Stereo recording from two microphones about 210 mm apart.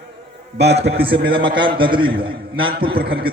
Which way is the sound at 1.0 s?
25° right (ahead or behind).